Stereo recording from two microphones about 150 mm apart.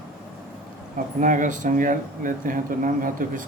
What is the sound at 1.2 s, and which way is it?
Speech, 60° right (ahead or behind).